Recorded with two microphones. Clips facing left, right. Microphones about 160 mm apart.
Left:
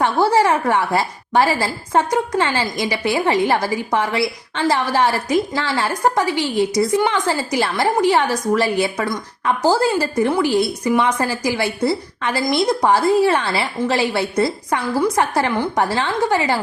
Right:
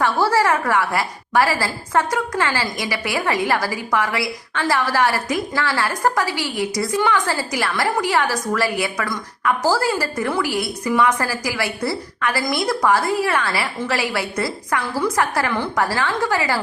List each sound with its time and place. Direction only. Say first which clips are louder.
0.0 s a woman's voice: left 2 dB; 20° left (ahead or behind)